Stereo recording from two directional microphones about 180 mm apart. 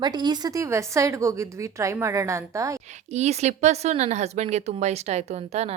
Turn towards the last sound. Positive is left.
turn(degrees=-35)  # may be behind; listen again after turning